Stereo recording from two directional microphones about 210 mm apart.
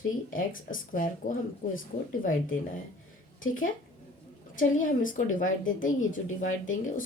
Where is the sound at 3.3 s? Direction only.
40° left (ahead or behind).